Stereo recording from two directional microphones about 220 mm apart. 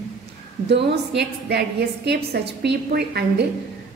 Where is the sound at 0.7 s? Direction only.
50° right (ahead or behind).